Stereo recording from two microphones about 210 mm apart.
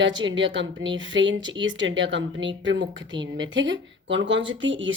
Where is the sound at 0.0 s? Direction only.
65° right (ahead or behind).